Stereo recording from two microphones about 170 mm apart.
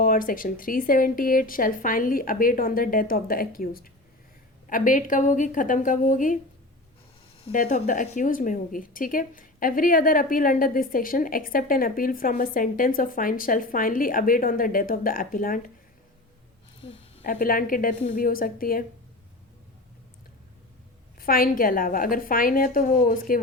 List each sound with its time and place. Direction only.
0.0 s a woman's voice: 55° left (ahead or behind)
7.5 s a woman's voice: 55° left (ahead or behind)
7.9 s a woman's voice: 45° left (ahead or behind)
17.2 s a woman's voice: 55° left (ahead or behind)
21.2 s a woman's voice: 60° left (ahead or behind)